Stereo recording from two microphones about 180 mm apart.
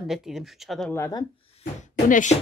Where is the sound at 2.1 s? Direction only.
45° left (ahead or behind).